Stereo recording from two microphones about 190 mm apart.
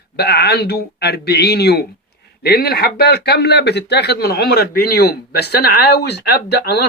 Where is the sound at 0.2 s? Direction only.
60° left (ahead or behind).